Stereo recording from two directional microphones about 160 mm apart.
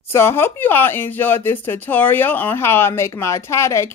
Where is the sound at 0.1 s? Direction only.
15° left (ahead or behind).